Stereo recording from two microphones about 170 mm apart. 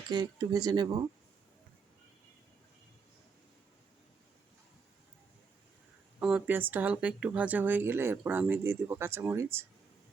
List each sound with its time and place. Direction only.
0.1 s speech: 25° right (ahead or behind)
6.1 s speech: 5° right (ahead or behind)